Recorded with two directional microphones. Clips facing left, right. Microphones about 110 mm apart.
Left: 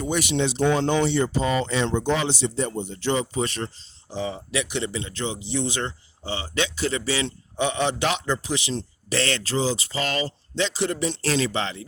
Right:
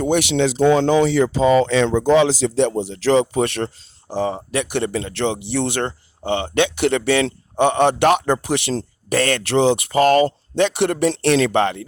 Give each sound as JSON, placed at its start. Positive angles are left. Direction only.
{"t": 0.0, "sound": "speech", "side_deg": -65}
{"t": 4.1, "sound": "speech", "side_deg": -50}
{"t": 9.4, "sound": "speech", "side_deg": -65}